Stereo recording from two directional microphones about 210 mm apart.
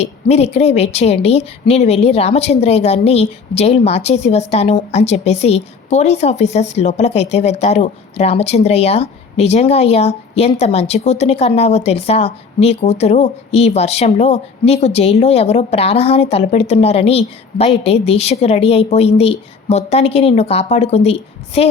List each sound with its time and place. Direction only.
0.0 s a woman's voice: 30° left (ahead or behind)